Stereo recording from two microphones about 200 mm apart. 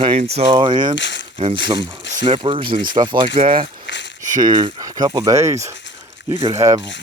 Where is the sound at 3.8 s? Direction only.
60° left (ahead or behind).